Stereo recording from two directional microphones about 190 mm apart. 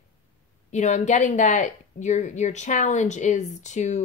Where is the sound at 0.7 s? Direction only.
40° left (ahead or behind).